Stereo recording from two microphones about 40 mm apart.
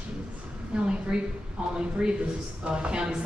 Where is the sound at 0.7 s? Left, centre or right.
Right.